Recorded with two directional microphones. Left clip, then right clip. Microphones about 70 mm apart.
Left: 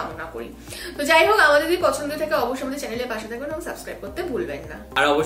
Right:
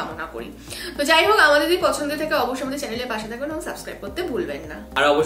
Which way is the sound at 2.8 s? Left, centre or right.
Right.